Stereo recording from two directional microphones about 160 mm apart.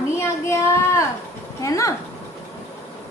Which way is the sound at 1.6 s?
20° left (ahead or behind).